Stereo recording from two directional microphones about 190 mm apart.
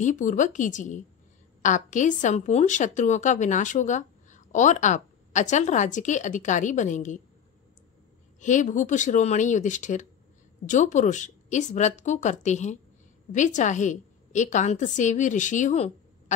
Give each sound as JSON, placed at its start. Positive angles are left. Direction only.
{"t": 0.0, "sound": "a woman's voice", "side_deg": 40}
{"t": 8.4, "sound": "a woman's voice", "side_deg": 40}